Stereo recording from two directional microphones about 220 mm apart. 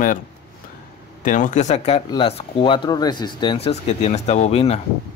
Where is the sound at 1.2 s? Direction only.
35° left (ahead or behind).